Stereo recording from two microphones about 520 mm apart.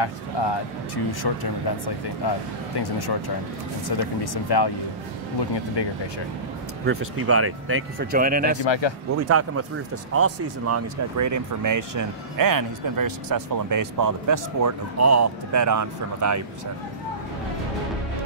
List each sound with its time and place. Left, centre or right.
0.0 s speech: left
5.8 s speech: left
6.9 s speech: right
8.6 s speech: left
9.1 s speech: right